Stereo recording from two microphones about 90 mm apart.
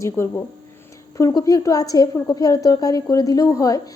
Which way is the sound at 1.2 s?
45° left (ahead or behind).